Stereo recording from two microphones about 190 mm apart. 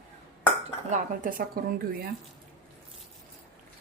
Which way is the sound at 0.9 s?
45° right (ahead or behind).